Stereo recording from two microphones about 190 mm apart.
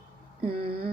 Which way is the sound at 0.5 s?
30° right (ahead or behind).